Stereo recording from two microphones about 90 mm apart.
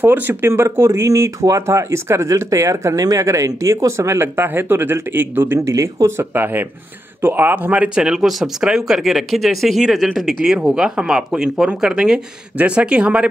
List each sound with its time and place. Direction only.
0.0 s speech: 20° right (ahead or behind)
5.7 s speech: 35° right (ahead or behind); by 13.3 s 10° right (ahead or behind)